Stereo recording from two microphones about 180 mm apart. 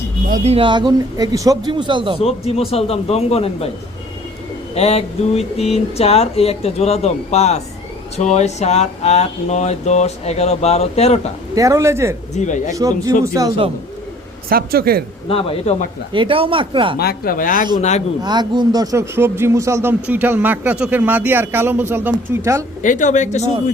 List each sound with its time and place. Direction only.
0.3 s a man's voice: 40° right (ahead or behind)
2.2 s speech: 35° left (ahead or behind)
4.7 s speech: 35° left (ahead or behind)
11.5 s speech: 20° right (ahead or behind)
12.3 s speech: 40° left (ahead or behind)
12.7 s a man's voice: 20° right (ahead or behind)
14.5 s speech: 60° right (ahead or behind)
15.3 s speech: 30° left (ahead or behind)
16.1 s a man's voice: 30° right (ahead or behind)
17.0 s speech: 55° left (ahead or behind)
17.7 s speech: 40° left (ahead or behind)
18.2 s speech: 25° right (ahead or behind)
22.8 s speech: 45° left (ahead or behind)